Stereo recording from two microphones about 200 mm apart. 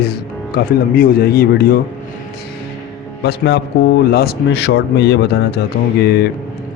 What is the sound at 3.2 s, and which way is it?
A man's voice, 55° left (ahead or behind).